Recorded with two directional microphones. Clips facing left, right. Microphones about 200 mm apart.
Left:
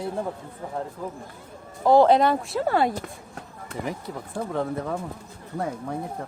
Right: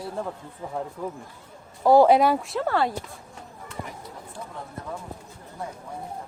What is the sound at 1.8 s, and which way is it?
Speech, 10° right (ahead or behind).